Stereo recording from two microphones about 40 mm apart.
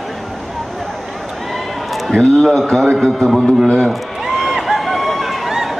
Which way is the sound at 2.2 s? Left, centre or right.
Centre.